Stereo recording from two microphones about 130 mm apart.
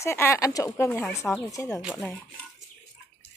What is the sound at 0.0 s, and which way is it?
Speech, 20° left (ahead or behind).